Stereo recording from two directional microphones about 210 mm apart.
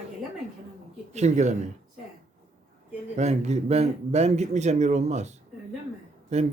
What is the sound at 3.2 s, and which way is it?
Speech, 30° right (ahead or behind).